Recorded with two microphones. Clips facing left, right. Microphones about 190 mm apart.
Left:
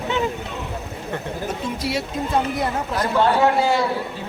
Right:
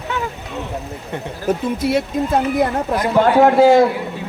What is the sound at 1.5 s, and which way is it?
Speech, 55° right (ahead or behind).